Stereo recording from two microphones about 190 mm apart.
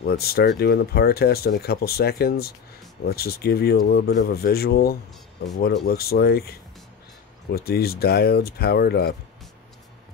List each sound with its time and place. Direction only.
0.0 s speech: 60° left (ahead or behind)